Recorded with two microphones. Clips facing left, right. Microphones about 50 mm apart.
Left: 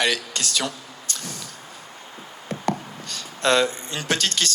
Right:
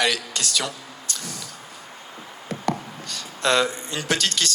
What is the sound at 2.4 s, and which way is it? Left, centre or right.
A man's voice, left.